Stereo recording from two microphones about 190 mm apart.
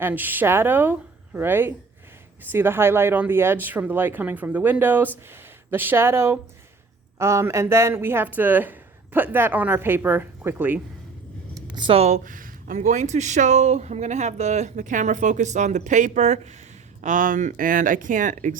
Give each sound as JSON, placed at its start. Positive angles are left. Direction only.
{"t": 0.0, "sound": "speech", "side_deg": -10}
{"t": 11.5, "sound": "speech", "side_deg": -25}